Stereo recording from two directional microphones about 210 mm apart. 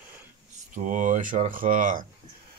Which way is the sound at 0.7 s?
35° right (ahead or behind).